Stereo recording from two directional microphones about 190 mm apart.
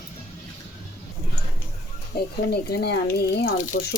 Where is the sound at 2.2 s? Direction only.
55° left (ahead or behind).